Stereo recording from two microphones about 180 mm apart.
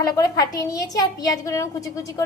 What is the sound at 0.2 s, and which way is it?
Speech, 20° left (ahead or behind).